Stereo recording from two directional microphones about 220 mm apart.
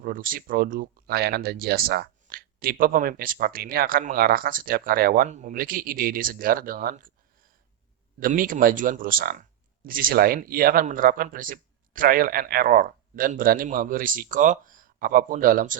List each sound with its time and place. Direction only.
0.0 s speech: 40° right (ahead or behind)
8.2 s speech: 40° right (ahead or behind)